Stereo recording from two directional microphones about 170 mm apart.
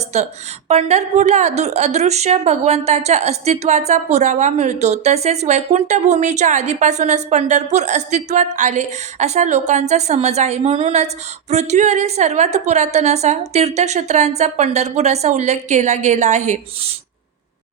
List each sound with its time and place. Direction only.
0.1 s a woman's voice: 40° right (ahead or behind)